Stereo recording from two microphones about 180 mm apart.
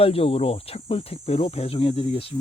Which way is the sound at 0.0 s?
30° left (ahead or behind).